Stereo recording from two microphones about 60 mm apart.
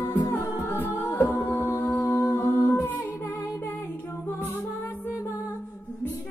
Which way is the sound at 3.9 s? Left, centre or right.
Left.